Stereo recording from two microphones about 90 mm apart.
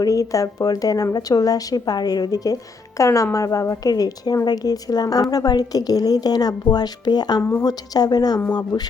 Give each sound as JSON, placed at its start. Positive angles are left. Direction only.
{"t": 0.0, "sound": "a woman's voice", "side_deg": 40}